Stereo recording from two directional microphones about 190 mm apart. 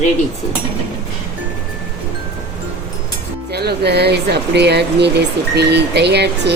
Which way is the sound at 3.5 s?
60° right (ahead or behind).